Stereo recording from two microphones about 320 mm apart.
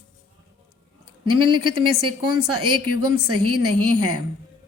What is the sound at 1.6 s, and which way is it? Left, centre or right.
Speech, right.